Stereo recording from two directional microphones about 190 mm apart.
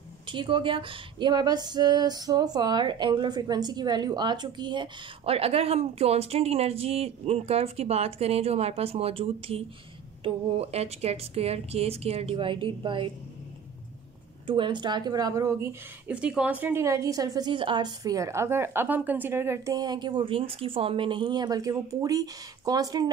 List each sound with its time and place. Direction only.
0.3 s a woman's voice: 25° right (ahead or behind)
14.4 s speech: 25° right (ahead or behind)